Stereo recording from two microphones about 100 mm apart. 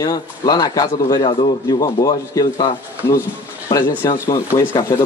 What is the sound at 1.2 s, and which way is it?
Speech, 65° left (ahead or behind).